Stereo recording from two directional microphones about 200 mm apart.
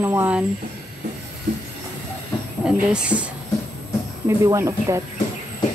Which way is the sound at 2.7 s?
5° right (ahead or behind).